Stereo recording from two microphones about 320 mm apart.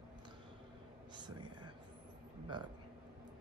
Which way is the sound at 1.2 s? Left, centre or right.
Centre.